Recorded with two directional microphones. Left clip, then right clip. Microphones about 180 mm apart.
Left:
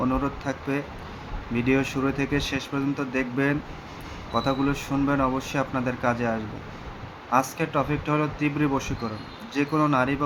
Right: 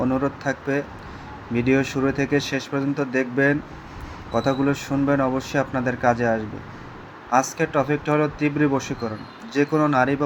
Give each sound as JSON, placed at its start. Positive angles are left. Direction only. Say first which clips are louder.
{"t": 0.0, "sound": "speech", "louder": "right 3 dB", "side_deg": -15}